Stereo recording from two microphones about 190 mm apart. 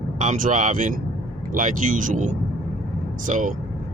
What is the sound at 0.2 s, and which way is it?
Speech, 40° right (ahead or behind).